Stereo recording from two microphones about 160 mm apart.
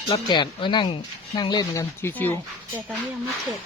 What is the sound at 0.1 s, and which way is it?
Speech, 30° left (ahead or behind).